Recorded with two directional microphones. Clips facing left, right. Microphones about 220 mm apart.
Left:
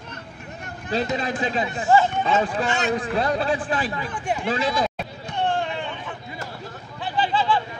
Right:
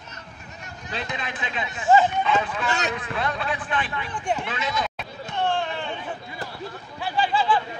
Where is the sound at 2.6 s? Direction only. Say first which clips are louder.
Left 3 dB; 40° right (ahead or behind).